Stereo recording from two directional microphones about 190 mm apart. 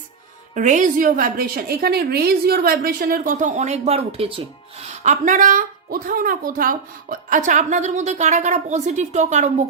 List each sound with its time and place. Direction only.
0.5 s a woman's voice: 40° right (ahead or behind)
5.0 s a woman's voice: 40° right (ahead or behind)